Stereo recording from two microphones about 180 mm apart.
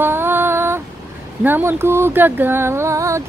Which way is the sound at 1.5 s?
10° right (ahead or behind).